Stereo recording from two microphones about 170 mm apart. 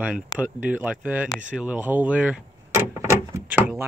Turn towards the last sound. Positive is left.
turn(degrees=-10)  # may be behind; listen again after turning